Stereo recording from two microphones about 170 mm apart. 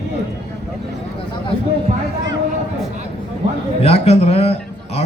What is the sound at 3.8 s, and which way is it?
A man's voice, 40° left (ahead or behind).